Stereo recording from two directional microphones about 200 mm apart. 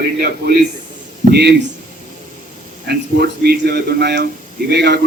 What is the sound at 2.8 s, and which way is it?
Speech, 50° right (ahead or behind).